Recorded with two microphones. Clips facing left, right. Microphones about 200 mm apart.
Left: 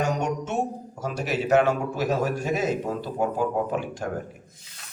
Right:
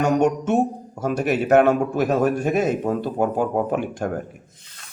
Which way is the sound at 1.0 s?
55° right (ahead or behind).